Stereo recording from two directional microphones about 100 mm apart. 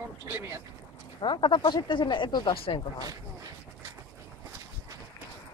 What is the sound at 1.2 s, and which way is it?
Speech, 55° left (ahead or behind).